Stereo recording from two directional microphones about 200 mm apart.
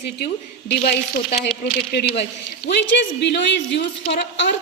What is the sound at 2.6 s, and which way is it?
Speech, 60° left (ahead or behind).